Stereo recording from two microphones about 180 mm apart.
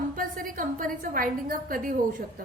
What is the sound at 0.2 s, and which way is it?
A woman's voice, 50° right (ahead or behind).